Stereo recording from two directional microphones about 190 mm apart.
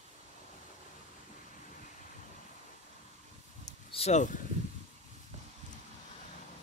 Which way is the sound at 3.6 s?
30° left (ahead or behind).